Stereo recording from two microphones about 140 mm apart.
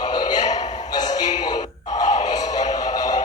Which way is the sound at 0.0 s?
30° left (ahead or behind).